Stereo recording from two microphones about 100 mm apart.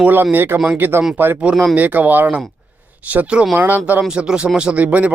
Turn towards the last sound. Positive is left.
turn(degrees=-15)  # may be behind; listen again after turning